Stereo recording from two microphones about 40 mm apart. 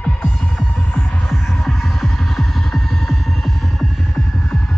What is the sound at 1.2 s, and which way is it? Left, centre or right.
Music, centre.